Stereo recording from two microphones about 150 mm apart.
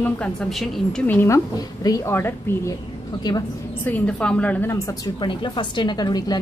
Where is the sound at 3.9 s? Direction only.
10° left (ahead or behind).